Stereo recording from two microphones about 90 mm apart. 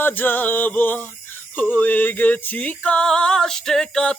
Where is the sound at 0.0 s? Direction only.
20° left (ahead or behind).